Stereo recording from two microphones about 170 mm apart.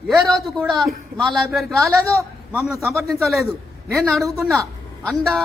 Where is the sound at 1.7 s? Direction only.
15° right (ahead or behind).